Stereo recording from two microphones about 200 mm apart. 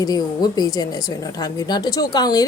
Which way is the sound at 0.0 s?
20° left (ahead or behind).